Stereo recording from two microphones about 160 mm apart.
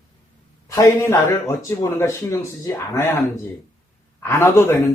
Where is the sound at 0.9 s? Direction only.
20° left (ahead or behind).